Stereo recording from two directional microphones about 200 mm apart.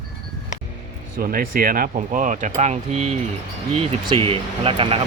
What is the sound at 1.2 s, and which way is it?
Speech, 45° right (ahead or behind).